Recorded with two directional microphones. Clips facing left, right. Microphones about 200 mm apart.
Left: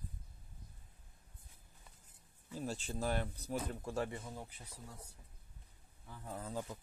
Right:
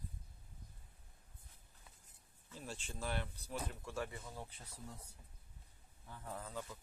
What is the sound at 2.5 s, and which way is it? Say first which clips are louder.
Speech: left 8 dB; 40° left (ahead or behind).